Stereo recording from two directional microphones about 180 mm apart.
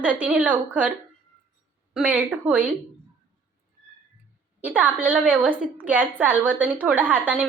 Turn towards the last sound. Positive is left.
turn(degrees=-10)  # may be behind; listen again after turning